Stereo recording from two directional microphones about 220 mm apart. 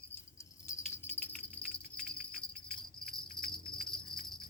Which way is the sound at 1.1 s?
5° left (ahead or behind).